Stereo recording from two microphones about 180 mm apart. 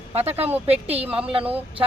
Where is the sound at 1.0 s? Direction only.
5° right (ahead or behind).